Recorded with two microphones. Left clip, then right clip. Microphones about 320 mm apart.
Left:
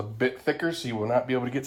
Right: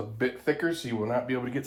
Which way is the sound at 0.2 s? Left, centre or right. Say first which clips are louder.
Left 1 dB; left.